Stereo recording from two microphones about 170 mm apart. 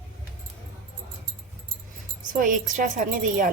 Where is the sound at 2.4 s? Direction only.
50° right (ahead or behind).